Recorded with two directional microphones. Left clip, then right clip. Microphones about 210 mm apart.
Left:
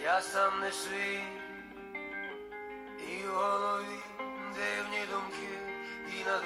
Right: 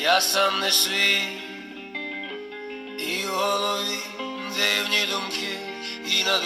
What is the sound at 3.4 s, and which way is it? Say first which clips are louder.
Mantra: right 6 dB; 50° right (ahead or behind).